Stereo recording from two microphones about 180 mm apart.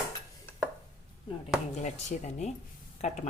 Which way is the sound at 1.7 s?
40° left (ahead or behind).